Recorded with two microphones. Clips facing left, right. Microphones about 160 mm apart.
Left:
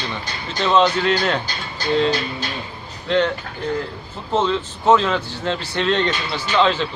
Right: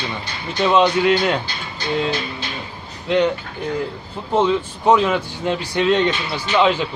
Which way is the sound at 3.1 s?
10° right (ahead or behind).